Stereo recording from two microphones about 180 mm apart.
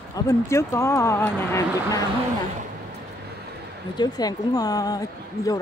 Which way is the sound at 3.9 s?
20° left (ahead or behind).